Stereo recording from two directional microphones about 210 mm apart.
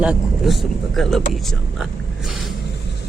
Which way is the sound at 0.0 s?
5° right (ahead or behind).